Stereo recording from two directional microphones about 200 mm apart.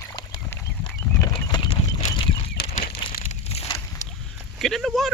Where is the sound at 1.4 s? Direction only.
20° left (ahead or behind).